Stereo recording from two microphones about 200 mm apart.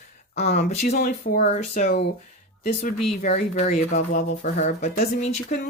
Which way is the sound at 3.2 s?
35° left (ahead or behind).